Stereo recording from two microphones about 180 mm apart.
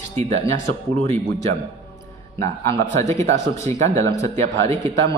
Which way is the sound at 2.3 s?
15° left (ahead or behind).